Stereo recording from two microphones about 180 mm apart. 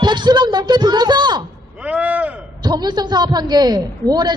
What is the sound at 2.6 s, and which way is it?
A woman's voice, 25° right (ahead or behind).